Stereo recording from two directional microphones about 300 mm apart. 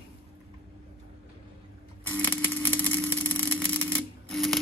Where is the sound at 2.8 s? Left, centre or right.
Centre.